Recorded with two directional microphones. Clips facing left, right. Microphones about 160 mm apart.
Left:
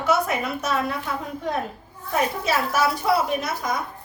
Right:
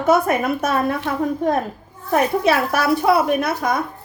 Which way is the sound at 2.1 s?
60° right (ahead or behind).